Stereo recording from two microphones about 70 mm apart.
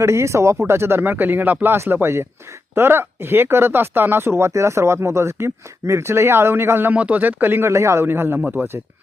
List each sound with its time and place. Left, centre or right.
0.0 s speech: right